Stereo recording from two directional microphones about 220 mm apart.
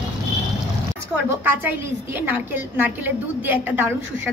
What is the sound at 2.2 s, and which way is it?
A woman's voice, 10° right (ahead or behind).